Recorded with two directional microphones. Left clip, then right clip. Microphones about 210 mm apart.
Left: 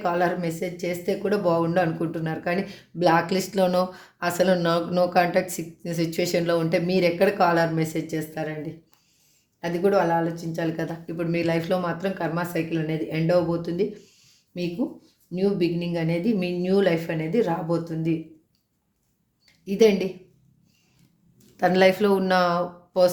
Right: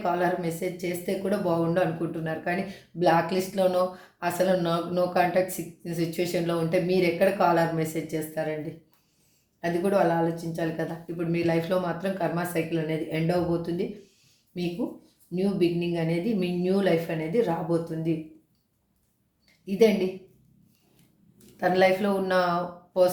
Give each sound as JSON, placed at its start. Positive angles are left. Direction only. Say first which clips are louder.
{"t": 0.0, "sound": "speech", "louder": "left 2 dB", "side_deg": 45}
{"t": 9.6, "sound": "speech", "louder": "left 2 dB", "side_deg": 45}
{"t": 15.4, "sound": "speech", "louder": "left 2 dB", "side_deg": 45}
{"t": 19.6, "sound": "a woman's voice", "louder": "left 3 dB", "side_deg": 45}
{"t": 21.6, "sound": "speech", "louder": "left 3 dB", "side_deg": 50}